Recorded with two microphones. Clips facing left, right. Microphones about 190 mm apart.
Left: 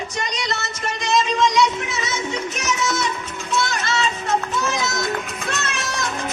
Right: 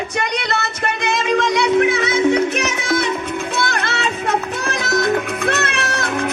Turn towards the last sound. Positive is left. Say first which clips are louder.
# right 5 dB
turn(degrees=-60)  # may be behind; listen again after turning